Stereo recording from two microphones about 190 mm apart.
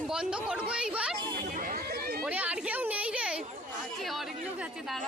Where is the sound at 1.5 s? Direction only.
50° right (ahead or behind).